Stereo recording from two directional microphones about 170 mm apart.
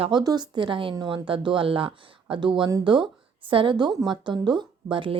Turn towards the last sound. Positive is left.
turn(degrees=-30)  # may be behind; listen again after turning